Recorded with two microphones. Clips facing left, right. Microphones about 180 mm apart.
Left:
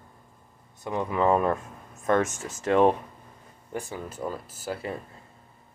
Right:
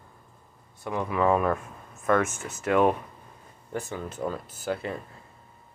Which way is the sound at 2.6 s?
30° left (ahead or behind).